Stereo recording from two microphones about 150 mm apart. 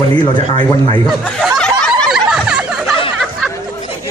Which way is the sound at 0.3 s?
30° left (ahead or behind).